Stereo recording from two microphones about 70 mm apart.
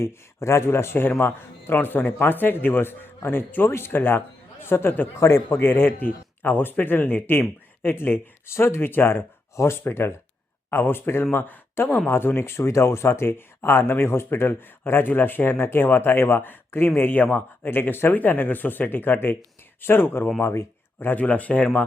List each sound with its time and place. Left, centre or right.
0.0 s speech: left
1.7 s a man's voice: left